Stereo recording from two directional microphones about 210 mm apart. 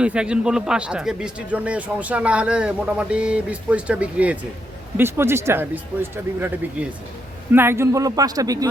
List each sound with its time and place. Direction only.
0.0 s speech: 5° right (ahead or behind)